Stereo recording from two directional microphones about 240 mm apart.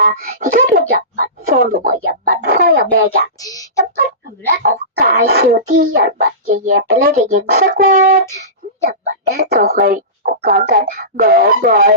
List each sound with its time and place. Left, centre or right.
0.0 s speech: right
3.3 s a sound: centre
4.5 s speech: right